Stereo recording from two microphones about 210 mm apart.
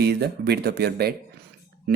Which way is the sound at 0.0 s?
50° right (ahead or behind).